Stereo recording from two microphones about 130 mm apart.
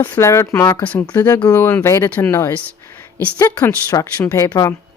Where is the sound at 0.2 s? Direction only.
20° left (ahead or behind).